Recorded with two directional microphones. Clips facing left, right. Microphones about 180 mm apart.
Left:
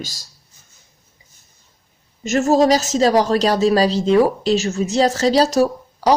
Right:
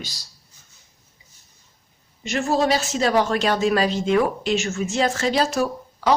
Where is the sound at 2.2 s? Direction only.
45° left (ahead or behind).